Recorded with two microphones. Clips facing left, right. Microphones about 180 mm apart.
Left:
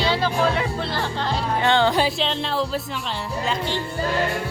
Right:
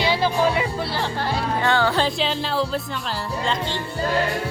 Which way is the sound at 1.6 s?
20° left (ahead or behind).